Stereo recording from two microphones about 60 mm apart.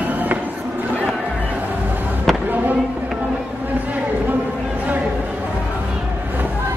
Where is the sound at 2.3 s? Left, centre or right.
Centre.